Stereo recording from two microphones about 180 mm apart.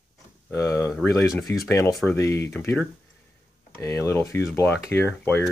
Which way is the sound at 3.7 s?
15° left (ahead or behind).